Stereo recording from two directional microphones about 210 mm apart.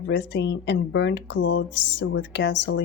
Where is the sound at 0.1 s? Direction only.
55° left (ahead or behind).